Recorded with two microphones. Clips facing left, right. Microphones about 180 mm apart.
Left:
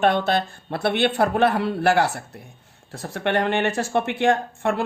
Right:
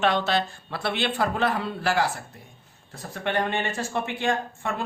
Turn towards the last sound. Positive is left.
turn(degrees=65)  # may be behind; listen again after turning